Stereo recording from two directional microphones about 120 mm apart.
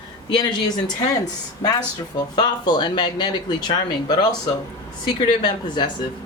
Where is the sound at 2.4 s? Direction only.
40° left (ahead or behind).